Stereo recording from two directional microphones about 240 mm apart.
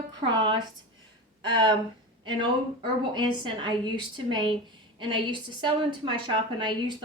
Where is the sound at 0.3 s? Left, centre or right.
Centre.